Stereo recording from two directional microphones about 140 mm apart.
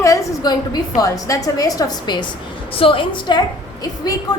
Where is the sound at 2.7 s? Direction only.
40° left (ahead or behind).